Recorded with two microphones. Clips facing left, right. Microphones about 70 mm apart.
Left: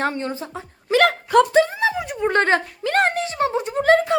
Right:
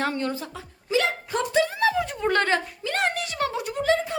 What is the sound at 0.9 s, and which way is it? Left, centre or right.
Hiccup, left.